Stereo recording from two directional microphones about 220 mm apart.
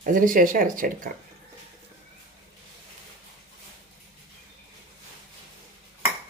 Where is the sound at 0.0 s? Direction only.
35° right (ahead or behind).